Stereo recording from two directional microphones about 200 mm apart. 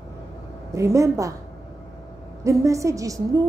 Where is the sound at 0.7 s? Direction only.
15° right (ahead or behind).